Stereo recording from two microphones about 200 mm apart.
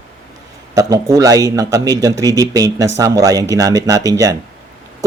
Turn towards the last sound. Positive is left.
turn(degrees=-15)  # may be behind; listen again after turning